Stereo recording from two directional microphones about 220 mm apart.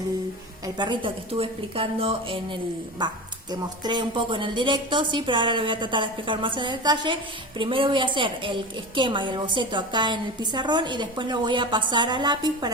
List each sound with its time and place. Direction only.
0.6 s a woman's voice: 20° right (ahead or behind)